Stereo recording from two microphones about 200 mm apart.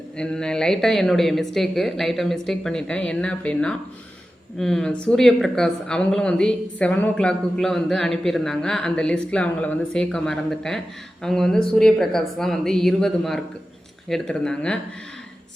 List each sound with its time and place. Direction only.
0.2 s a woman's voice: 5° left (ahead or behind)